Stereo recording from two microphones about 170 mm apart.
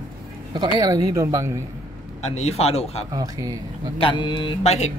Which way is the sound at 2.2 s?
40° left (ahead or behind).